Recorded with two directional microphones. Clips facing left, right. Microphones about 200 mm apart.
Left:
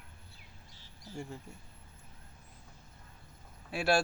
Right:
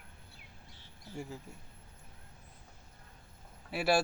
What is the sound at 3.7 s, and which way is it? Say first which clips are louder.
Speech: even; 5° right (ahead or behind).